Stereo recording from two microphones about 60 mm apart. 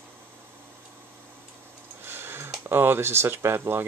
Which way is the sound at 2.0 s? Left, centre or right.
Right.